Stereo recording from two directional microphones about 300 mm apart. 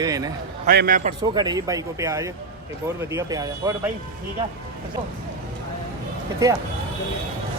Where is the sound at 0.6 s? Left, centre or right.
Right.